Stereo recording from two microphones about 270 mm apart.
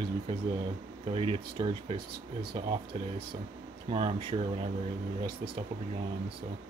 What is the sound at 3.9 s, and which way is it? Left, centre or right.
Speech, centre.